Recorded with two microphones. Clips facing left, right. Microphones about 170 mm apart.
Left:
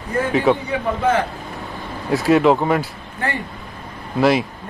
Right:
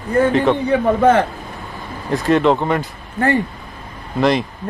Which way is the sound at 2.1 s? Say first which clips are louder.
Even; 5° left (ahead or behind).